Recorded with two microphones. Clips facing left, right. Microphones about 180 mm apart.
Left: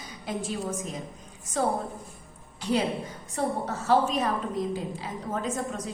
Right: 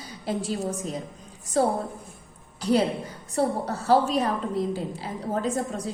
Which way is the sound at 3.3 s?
35° right (ahead or behind).